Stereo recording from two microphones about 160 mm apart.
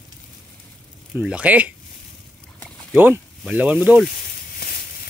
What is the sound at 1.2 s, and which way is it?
Speech, 10° right (ahead or behind).